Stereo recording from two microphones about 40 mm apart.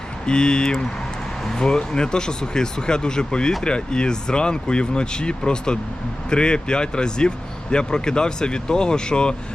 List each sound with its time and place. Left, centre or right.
0.3 s speech: left